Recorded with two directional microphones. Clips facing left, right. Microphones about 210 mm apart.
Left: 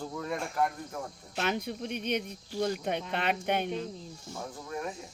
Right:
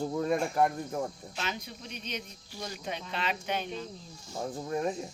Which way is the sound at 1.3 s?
55° left (ahead or behind).